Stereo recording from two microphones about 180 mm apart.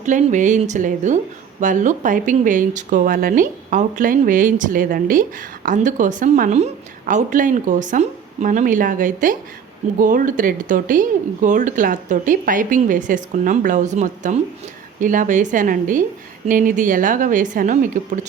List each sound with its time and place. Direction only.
0.0 s speech: 45° right (ahead or behind)